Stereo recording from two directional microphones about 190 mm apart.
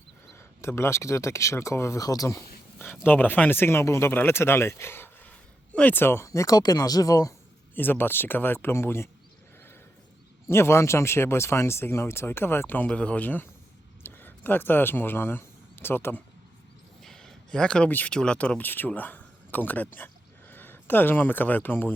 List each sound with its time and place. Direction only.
0.3 s speech: 15° left (ahead or behind)
10.4 s speech: 15° left (ahead or behind)